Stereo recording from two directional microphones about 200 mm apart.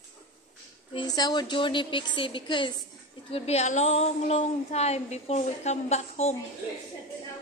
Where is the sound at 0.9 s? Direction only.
20° left (ahead or behind).